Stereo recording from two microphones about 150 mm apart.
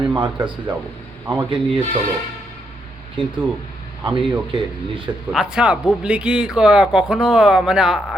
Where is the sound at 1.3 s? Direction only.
35° right (ahead or behind).